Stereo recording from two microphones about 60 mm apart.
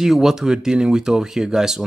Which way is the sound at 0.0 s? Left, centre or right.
Centre.